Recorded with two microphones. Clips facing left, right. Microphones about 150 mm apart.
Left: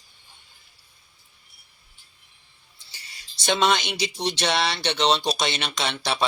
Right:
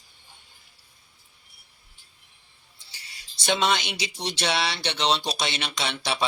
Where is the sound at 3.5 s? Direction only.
5° right (ahead or behind).